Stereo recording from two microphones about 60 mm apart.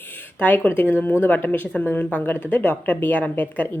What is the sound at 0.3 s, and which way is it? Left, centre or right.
Speech, left.